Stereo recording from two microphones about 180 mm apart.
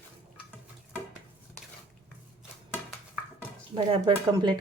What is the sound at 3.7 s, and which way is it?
Speech, 30° right (ahead or behind).